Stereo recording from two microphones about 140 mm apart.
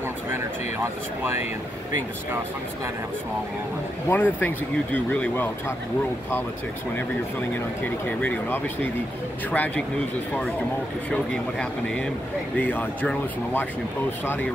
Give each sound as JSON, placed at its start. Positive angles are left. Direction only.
{"t": 0.3, "sound": "speech", "side_deg": -15}
{"t": 4.1, "sound": "speech", "side_deg": 15}
{"t": 7.8, "sound": "speech", "side_deg": 10}
{"t": 11.1, "sound": "speech", "side_deg": 10}